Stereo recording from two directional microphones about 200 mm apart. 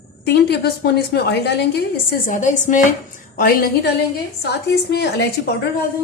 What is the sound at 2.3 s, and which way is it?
A woman's voice, 40° left (ahead or behind).